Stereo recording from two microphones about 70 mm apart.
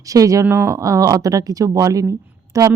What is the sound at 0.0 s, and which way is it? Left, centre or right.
Speech, right.